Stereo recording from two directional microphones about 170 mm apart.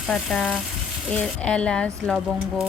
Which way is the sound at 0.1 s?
5° left (ahead or behind).